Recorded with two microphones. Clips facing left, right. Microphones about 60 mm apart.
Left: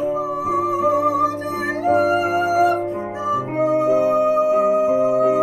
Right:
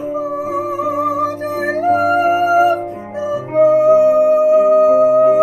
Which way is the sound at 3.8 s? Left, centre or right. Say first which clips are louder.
Right 6 dB; left.